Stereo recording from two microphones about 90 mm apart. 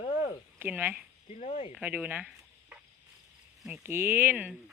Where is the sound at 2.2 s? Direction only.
10° right (ahead or behind).